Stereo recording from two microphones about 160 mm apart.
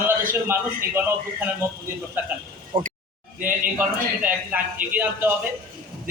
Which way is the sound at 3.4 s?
10° right (ahead or behind).